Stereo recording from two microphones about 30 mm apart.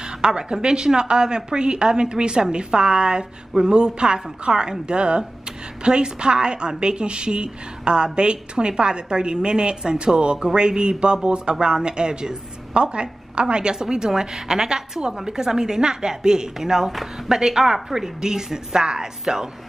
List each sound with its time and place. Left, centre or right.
0.0 s a woman's voice: right